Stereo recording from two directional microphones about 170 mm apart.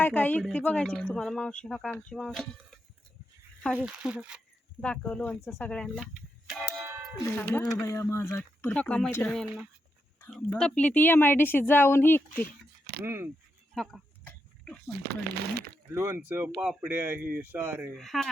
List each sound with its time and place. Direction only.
0.0 s speech: 10° left (ahead or behind)
3.8 s speech: 5° right (ahead or behind)
4.8 s speech: 5° left (ahead or behind)
6.5 s a sound: 5° right (ahead or behind)
7.3 s speech: 15° left (ahead or behind)
12.8 s a sound: 65° right (ahead or behind)
13.1 s speech: 15° right (ahead or behind)
13.7 s oink: 5° left (ahead or behind)
14.9 s speech: 70° right (ahead or behind)
15.9 s speech: 15° right (ahead or behind)
17.9 s speech: centre (ahead or behind)